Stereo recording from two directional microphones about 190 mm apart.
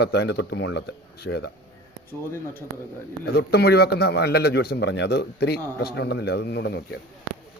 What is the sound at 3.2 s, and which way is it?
A man's voice, 60° left (ahead or behind).